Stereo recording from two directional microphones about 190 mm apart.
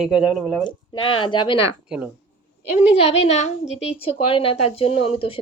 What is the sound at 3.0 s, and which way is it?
Speech, 35° left (ahead or behind).